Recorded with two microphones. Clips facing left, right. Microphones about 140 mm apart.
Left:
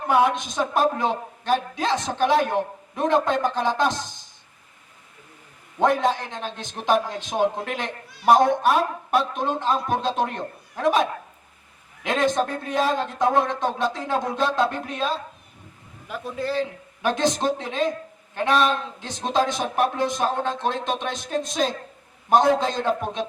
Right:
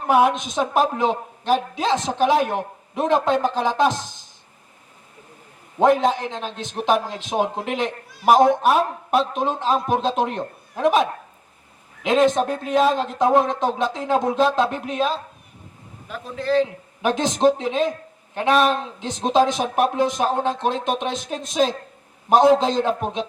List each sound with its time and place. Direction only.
0.1 s a man's voice: 15° right (ahead or behind)
5.8 s a man's voice: 20° right (ahead or behind)
12.0 s a man's voice: 20° right (ahead or behind)
16.0 s a man's voice: 10° left (ahead or behind)
16.6 s a man's voice: 20° right (ahead or behind)
18.9 s a man's voice: 20° right (ahead or behind)